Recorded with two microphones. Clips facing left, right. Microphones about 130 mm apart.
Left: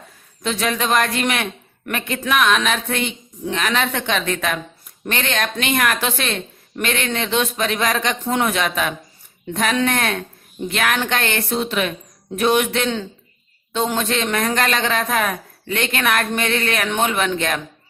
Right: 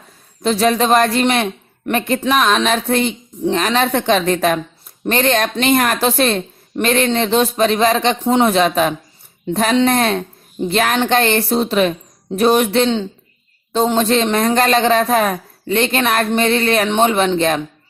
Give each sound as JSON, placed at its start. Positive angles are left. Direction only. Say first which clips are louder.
{"t": 0.4, "sound": "a woman's voice", "louder": "right 7 dB", "side_deg": -35}